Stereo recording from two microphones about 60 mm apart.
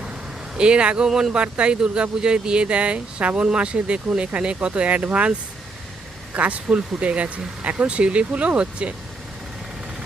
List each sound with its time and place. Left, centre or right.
0.5 s speech: centre
6.3 s speech: right